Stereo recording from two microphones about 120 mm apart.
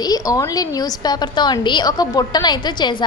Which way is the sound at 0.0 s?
30° left (ahead or behind).